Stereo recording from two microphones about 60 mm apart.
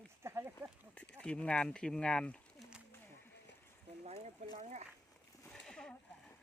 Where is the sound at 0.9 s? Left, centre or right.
Centre.